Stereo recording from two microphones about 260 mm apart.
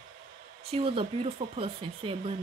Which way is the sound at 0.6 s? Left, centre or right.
Right.